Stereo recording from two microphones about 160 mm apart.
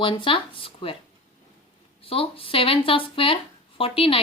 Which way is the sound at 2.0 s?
35° left (ahead or behind).